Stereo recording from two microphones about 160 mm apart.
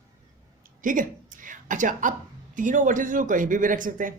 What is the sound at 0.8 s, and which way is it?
A woman's voice, 55° right (ahead or behind).